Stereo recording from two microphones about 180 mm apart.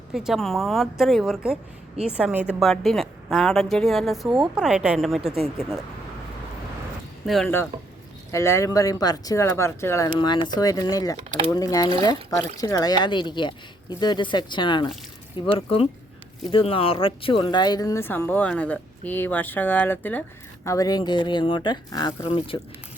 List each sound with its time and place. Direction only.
0.1 s a woman's voice: 5° right (ahead or behind)
7.3 s a woman's voice: centre (ahead or behind)
8.3 s speech: 15° left (ahead or behind)
11.2 s speech: 40° right (ahead or behind)
11.5 s speech: 20° left (ahead or behind)